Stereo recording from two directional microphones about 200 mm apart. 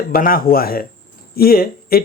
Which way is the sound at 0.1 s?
45° left (ahead or behind).